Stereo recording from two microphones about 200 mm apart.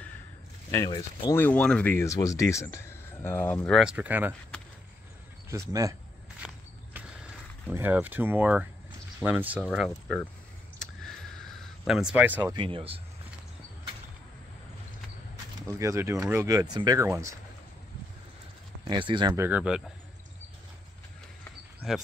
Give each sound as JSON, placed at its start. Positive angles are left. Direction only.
{"t": 0.7, "sound": "speech", "side_deg": 15}
{"t": 5.5, "sound": "speech", "side_deg": -15}
{"t": 6.4, "sound": "walk", "side_deg": -5}
{"t": 7.6, "sound": "speech", "side_deg": -10}
{"t": 10.8, "sound": "a sound", "side_deg": 0}
{"t": 12.5, "sound": "speech", "side_deg": -25}
{"t": 15.8, "sound": "speech", "side_deg": -15}
{"t": 18.9, "sound": "speech", "side_deg": -25}